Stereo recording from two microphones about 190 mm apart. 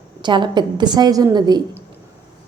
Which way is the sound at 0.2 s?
25° right (ahead or behind).